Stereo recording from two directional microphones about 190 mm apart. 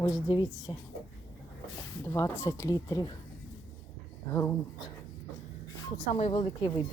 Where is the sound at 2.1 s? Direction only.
15° left (ahead or behind).